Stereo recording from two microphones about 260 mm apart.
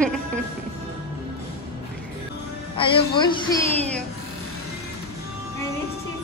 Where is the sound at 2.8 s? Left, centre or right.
Centre.